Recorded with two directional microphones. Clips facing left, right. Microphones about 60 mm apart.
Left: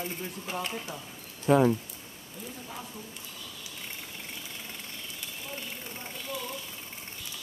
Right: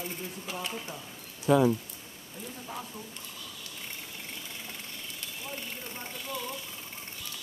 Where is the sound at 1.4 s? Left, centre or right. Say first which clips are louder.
Left 1 dB; left.